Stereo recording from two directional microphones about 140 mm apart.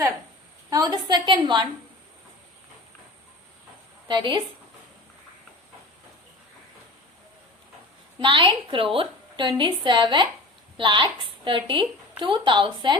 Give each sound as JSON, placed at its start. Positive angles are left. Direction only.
{"t": 0.7, "sound": "a sound", "side_deg": -30}
{"t": 4.1, "sound": "a woman's voice", "side_deg": -35}
{"t": 8.2, "sound": "a woman's voice", "side_deg": -35}